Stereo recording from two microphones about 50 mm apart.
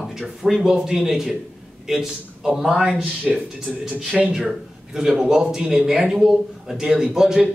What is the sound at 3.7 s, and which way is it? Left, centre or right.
A man's voice, right.